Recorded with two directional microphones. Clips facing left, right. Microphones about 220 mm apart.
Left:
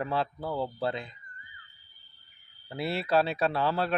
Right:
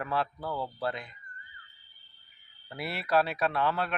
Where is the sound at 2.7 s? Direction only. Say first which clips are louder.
Left 3 dB; 25° left (ahead or behind).